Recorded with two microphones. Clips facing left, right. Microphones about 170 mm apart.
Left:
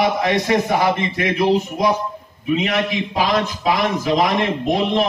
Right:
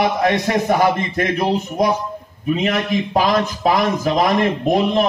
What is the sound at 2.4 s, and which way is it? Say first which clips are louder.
Speech: right 1 dB; 45° right (ahead or behind).